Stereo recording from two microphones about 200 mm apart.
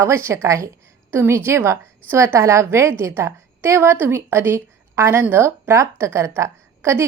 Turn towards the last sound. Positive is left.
turn(degrees=-15)  # may be behind; listen again after turning